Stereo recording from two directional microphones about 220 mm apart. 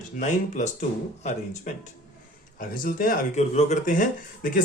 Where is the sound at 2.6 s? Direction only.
40° left (ahead or behind).